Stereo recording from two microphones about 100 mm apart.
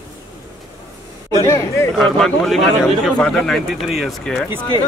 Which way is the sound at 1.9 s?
5° left (ahead or behind).